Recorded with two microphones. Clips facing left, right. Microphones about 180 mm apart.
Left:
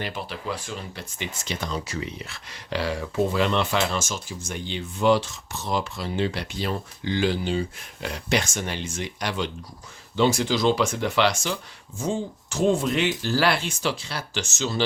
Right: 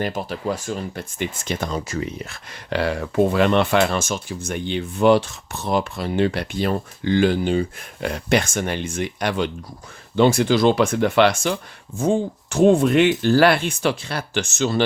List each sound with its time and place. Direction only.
0.0 s speech: 45° right (ahead or behind)